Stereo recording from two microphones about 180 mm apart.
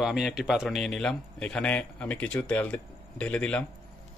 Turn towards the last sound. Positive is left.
turn(degrees=5)  # may be behind; listen again after turning